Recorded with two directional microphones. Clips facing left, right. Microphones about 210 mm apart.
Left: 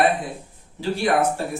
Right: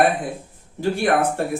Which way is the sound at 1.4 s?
60° right (ahead or behind).